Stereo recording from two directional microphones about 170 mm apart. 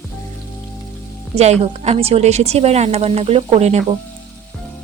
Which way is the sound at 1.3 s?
40° right (ahead or behind).